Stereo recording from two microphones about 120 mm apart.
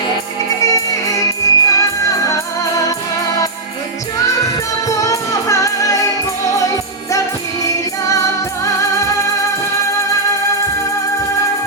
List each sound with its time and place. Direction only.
0.6 s music: 30° left (ahead or behind)
4.9 s music: 25° left (ahead or behind)